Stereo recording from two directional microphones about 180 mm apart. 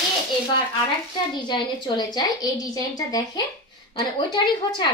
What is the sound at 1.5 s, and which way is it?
A woman's voice, 20° left (ahead or behind).